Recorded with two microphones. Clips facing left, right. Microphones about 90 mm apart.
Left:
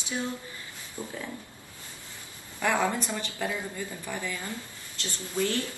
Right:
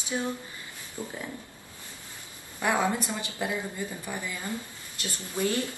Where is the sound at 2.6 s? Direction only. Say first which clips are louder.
Even; 15° right (ahead or behind).